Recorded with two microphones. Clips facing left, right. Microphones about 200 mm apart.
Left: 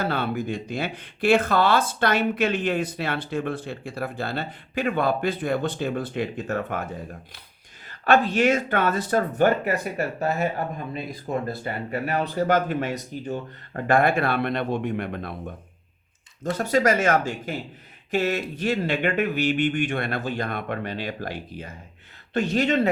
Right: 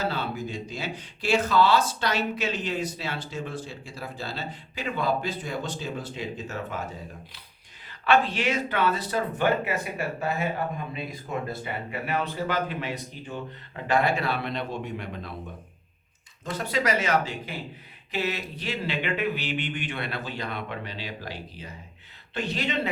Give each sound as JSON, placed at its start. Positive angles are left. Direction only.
{"t": 0.0, "sound": "speech", "side_deg": 55}
{"t": 7.9, "sound": "speech", "side_deg": 45}
{"t": 16.4, "sound": "speech", "side_deg": 45}